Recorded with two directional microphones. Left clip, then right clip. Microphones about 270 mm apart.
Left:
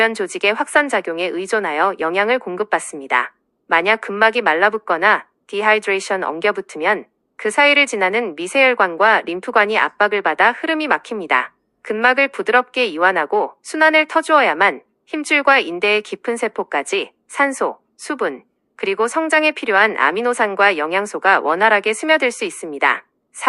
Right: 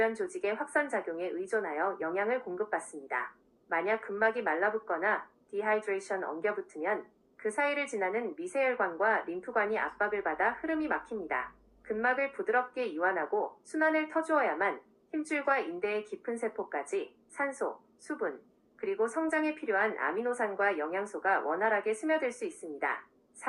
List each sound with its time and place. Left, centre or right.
0.0 s a woman's voice: left
18.0 s a woman's voice: left